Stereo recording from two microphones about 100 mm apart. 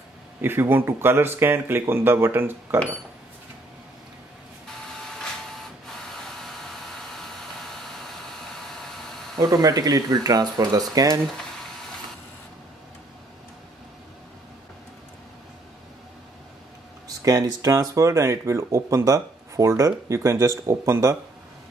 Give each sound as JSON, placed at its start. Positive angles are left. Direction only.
{"t": 0.4, "sound": "speech", "side_deg": -20}
{"t": 6.4, "sound": "hair dryer", "side_deg": 5}
{"t": 9.4, "sound": "speech", "side_deg": -40}
{"t": 17.2, "sound": "speech", "side_deg": -40}